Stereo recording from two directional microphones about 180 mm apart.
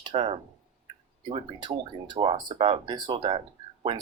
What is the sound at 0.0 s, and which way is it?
Speech, 30° right (ahead or behind).